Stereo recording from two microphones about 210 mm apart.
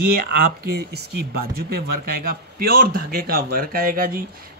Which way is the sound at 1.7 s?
45° right (ahead or behind).